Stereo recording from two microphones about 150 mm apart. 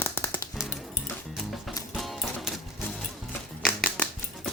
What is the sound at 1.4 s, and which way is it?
Music, centre (ahead or behind).